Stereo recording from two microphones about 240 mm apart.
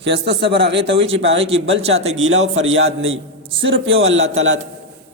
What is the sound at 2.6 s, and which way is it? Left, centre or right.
Mantra, right.